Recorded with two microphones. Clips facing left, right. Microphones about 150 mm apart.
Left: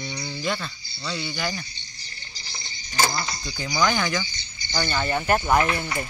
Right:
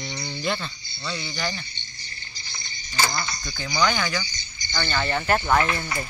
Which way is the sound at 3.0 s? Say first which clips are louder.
Left 1 dB; 25° left (ahead or behind).